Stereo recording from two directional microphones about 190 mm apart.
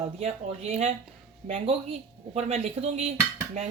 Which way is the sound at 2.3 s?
35° right (ahead or behind).